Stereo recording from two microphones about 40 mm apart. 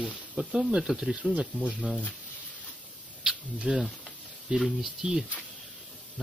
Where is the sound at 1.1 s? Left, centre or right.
Right.